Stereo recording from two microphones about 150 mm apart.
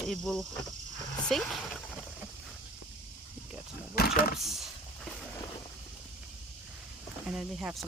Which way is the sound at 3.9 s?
90° left.